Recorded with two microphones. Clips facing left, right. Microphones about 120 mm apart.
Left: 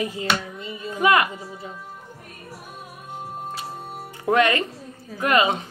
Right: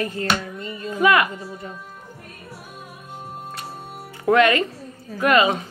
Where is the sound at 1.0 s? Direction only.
30° left (ahead or behind).